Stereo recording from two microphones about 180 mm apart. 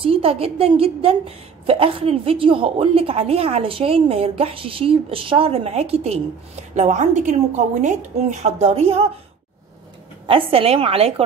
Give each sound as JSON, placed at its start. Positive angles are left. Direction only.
{"t": 0.0, "sound": "a woman's voice", "side_deg": -30}
{"t": 10.2, "sound": "a woman's voice", "side_deg": -30}